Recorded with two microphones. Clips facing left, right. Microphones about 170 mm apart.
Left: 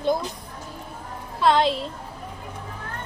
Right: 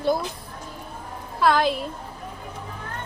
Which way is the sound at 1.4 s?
25° left (ahead or behind).